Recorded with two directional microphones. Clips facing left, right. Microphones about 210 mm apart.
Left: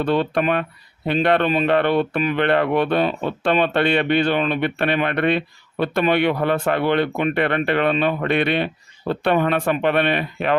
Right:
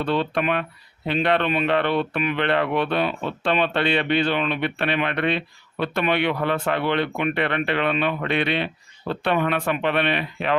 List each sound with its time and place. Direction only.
0.0 s speech: 45° left (ahead or behind)